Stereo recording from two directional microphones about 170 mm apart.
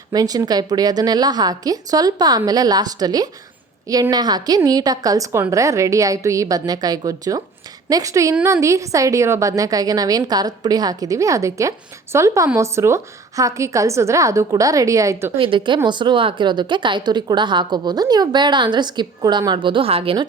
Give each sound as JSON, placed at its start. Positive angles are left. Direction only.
{"t": 0.1, "sound": "a woman's voice", "side_deg": -20}
{"t": 8.4, "sound": "a woman's voice", "side_deg": -5}
{"t": 8.6, "sound": "a woman's voice", "side_deg": -20}
{"t": 15.4, "sound": "a woman's voice", "side_deg": -30}